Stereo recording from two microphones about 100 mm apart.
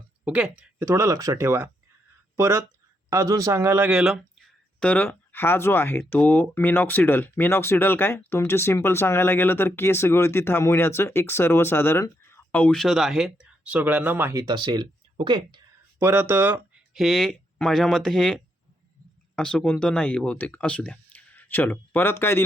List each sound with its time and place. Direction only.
0.3 s speech: 10° right (ahead or behind)
0.8 s a man's voice: 30° right (ahead or behind)
3.8 s speech: 10° right (ahead or behind)
4.8 s speech: 15° left (ahead or behind)
12.8 s speech: 5° right (ahead or behind); by 14.3 s 20° right (ahead or behind)
14.3 s speech: 45° right (ahead or behind)
16.0 s speech: 20° right (ahead or behind)
16.9 s speech: centre (ahead or behind); by 22.4 s 25° left (ahead or behind)